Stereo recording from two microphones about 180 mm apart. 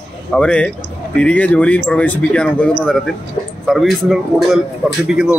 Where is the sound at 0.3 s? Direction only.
5° left (ahead or behind).